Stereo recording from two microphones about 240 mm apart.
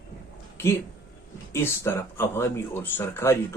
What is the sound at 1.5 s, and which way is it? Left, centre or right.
Speech, centre.